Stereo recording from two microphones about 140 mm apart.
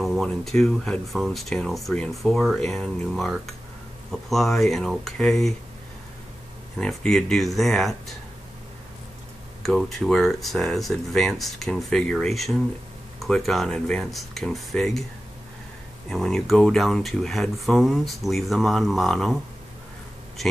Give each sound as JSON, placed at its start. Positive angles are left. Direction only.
{"t": 0.0, "sound": "speech", "side_deg": 0}
{"t": 6.8, "sound": "speech", "side_deg": 5}
{"t": 9.6, "sound": "speech", "side_deg": 0}
{"t": 16.1, "sound": "speech", "side_deg": 5}